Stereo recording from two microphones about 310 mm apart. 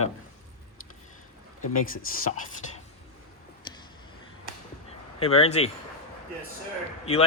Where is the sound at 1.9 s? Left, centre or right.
Left.